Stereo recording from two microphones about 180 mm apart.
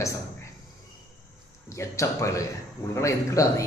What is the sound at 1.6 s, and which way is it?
A man's voice, 15° left (ahead or behind).